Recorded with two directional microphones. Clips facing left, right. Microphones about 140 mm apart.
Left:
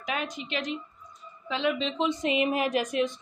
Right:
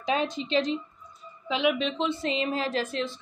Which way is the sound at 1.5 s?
15° right (ahead or behind).